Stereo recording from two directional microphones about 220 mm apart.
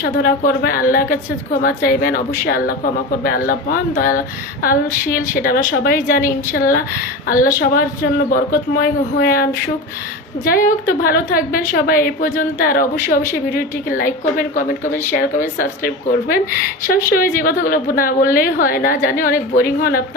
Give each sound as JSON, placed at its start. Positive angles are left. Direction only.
{"t": 0.0, "sound": "a woman's voice", "side_deg": 45}